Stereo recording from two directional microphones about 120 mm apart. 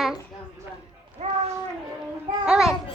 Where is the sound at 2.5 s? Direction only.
5° right (ahead or behind).